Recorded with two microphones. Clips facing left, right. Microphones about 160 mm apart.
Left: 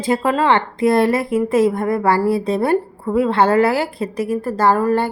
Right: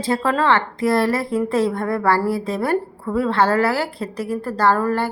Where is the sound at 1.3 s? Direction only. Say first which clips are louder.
Left 4 dB; 10° left (ahead or behind).